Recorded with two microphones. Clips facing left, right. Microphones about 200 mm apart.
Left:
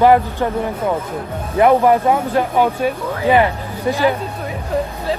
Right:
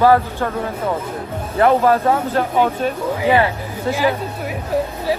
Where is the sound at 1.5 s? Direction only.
15° left (ahead or behind).